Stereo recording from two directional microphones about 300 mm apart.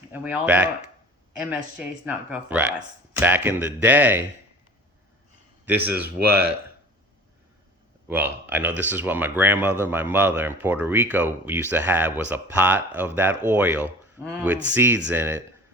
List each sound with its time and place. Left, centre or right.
0.1 s speech: centre
5.6 s speech: centre
6.2 s speech: right
8.0 s speech: centre